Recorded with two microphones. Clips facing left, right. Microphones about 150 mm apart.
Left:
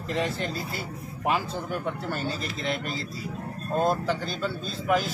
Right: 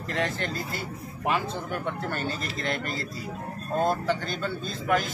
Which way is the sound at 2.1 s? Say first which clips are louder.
Even; centre (ahead or behind).